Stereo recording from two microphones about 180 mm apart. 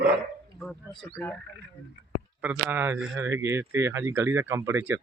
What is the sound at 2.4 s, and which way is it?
Speech, 10° right (ahead or behind).